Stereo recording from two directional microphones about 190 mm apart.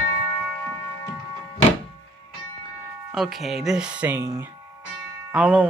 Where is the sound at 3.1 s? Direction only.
Centre (ahead or behind).